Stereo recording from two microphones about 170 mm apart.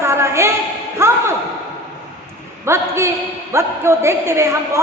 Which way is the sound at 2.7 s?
15° right (ahead or behind).